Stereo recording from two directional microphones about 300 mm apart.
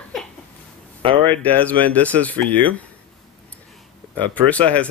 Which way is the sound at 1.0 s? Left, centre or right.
Centre.